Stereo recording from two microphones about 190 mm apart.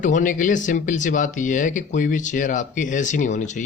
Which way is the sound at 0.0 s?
45° left (ahead or behind).